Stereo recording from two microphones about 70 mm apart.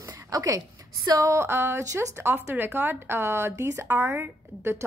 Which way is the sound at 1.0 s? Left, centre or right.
Right.